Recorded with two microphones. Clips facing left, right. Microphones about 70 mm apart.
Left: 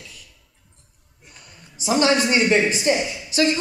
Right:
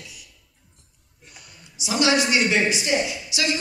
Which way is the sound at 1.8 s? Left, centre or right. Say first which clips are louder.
Left 2 dB; left.